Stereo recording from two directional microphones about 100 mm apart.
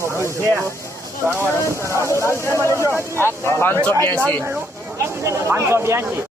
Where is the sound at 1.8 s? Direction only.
30° left (ahead or behind).